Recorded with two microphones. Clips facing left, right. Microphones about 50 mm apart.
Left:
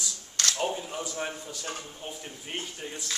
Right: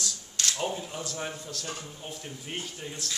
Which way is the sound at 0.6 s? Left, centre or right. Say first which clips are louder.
Left 2 dB; centre.